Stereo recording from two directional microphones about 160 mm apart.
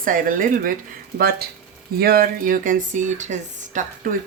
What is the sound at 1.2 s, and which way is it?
Speech, 70° right (ahead or behind).